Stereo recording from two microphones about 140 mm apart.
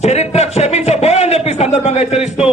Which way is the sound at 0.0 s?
50° left (ahead or behind).